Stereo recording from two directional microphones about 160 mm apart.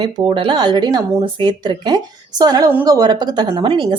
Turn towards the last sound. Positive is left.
turn(degrees=-30)  # may be behind; listen again after turning